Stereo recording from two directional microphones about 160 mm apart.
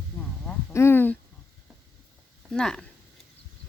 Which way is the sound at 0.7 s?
15° left (ahead or behind).